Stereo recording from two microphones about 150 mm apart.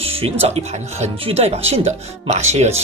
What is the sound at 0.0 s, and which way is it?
Speech, 40° right (ahead or behind).